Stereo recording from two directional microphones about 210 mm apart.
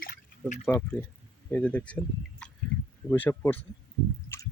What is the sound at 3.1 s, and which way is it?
Speech, 10° left (ahead or behind).